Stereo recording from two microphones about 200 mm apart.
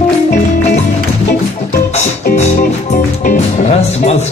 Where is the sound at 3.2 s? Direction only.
40° left (ahead or behind).